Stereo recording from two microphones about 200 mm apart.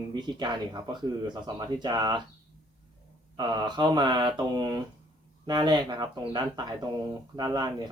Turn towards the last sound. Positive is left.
turn(degrees=-20)  # may be behind; listen again after turning